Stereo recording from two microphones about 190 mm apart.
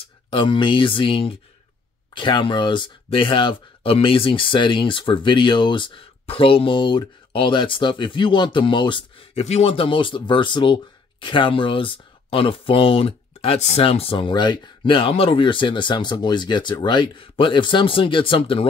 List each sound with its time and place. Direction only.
0.3 s speech: 25° left (ahead or behind)